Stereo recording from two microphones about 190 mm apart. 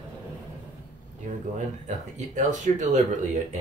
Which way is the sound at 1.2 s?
40° right (ahead or behind).